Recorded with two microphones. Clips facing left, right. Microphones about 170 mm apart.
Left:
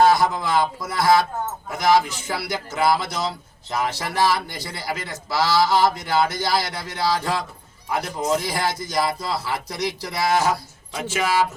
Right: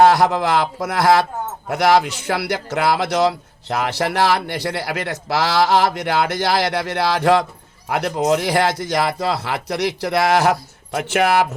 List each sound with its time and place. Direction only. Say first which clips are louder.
0.0 s speech: right 4 dB; 70° right (ahead or behind)